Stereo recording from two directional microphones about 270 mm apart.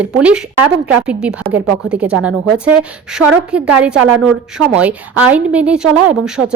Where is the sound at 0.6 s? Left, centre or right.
Right.